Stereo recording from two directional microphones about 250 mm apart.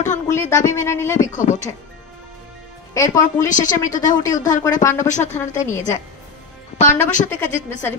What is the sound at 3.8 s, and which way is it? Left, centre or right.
A woman's voice, left.